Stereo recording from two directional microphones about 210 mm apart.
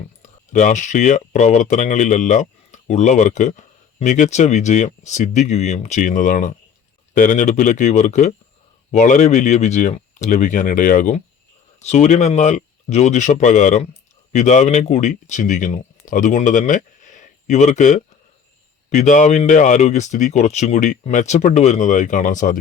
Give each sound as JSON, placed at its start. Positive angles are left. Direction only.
{"t": 0.2, "sound": "speech", "side_deg": 35}